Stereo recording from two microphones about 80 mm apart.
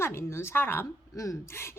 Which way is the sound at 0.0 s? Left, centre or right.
Left.